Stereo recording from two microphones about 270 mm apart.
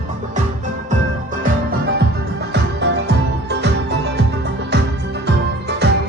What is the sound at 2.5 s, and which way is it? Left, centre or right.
Music, right.